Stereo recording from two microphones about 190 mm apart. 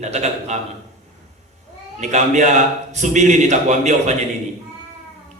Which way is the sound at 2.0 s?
40° right (ahead or behind).